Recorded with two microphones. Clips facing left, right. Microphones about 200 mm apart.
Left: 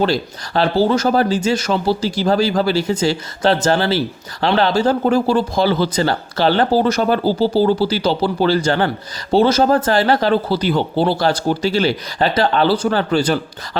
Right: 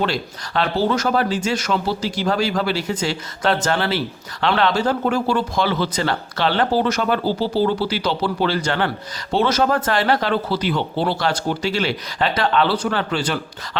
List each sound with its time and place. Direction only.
0.0 s speech: 35° left (ahead or behind)